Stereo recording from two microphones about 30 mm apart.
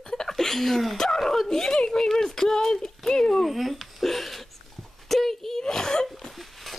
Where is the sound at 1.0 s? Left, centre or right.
Left.